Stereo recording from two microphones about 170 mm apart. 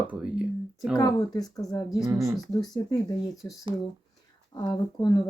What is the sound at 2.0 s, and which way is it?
Speech, 20° right (ahead or behind).